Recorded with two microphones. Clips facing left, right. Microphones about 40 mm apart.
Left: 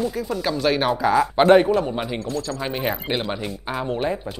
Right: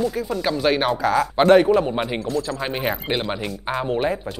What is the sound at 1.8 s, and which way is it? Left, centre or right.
A man's voice, centre.